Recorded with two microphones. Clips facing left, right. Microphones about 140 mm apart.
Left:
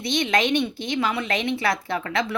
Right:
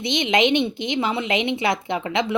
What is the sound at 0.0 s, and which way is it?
A woman's voice, 20° right (ahead or behind).